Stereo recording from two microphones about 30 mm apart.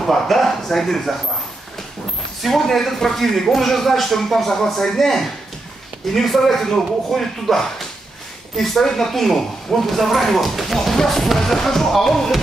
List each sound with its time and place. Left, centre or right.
0.0 s a sound: centre
0.7 s speech: centre
2.4 s a woman's voice: centre